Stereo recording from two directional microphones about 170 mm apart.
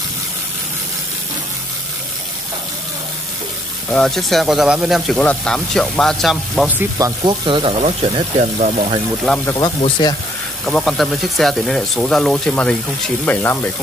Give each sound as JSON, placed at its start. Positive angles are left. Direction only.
{"t": 3.9, "sound": "speech", "side_deg": 5}
{"t": 6.8, "sound": "speech", "side_deg": -20}
{"t": 9.3, "sound": "speech", "side_deg": 5}
{"t": 10.0, "sound": "speech", "side_deg": 25}
{"t": 10.6, "sound": "speech", "side_deg": 0}